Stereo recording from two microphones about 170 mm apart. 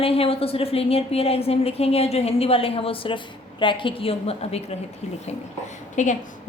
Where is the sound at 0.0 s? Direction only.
35° left (ahead or behind).